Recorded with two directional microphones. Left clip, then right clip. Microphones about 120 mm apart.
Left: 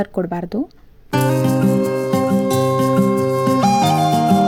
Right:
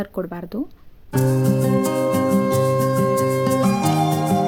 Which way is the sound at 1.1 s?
10° left (ahead or behind).